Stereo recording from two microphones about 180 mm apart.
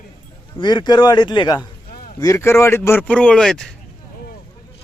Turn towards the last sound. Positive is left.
turn(degrees=5)  # may be behind; listen again after turning